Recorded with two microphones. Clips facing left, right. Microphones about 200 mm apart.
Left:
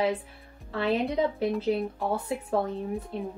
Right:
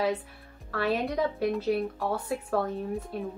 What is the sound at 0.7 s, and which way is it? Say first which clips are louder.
A woman's voice: left 1 dB; 20° left (ahead or behind).